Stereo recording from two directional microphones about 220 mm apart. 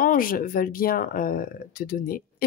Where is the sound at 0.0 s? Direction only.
40° left (ahead or behind).